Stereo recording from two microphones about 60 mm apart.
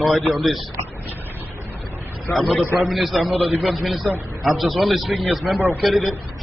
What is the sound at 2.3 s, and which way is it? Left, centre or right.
A man's voice, centre.